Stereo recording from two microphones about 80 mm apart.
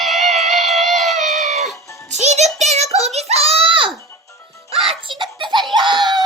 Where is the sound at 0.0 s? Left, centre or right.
Centre.